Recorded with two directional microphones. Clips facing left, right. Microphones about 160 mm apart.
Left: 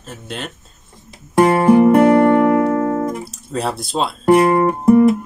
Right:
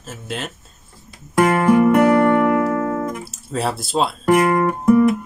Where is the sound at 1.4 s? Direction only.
30° left (ahead or behind).